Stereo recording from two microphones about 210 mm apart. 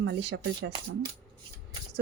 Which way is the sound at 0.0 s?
60° right (ahead or behind).